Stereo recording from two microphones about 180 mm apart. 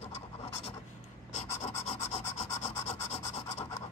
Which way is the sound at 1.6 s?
40° left (ahead or behind).